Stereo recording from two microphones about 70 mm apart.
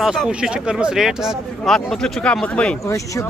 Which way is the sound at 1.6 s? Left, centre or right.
Centre.